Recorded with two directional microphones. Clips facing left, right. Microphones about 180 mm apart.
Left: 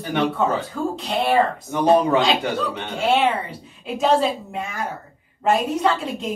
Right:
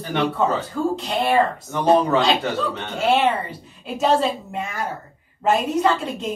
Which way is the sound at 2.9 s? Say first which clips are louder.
Even; 5° left (ahead or behind).